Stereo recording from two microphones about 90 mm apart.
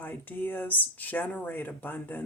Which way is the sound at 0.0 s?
20° left (ahead or behind).